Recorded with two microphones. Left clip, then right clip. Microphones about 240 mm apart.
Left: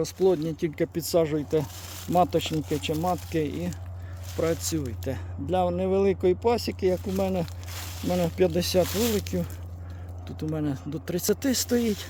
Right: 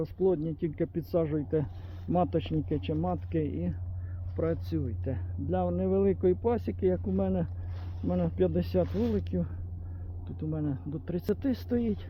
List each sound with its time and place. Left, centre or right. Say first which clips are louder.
0.0 s speech: left 5 dB; centre